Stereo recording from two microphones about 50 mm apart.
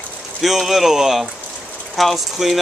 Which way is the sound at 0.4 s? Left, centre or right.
Centre.